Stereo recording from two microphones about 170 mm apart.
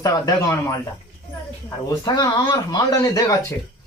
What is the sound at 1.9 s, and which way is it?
Speech, 25° left (ahead or behind).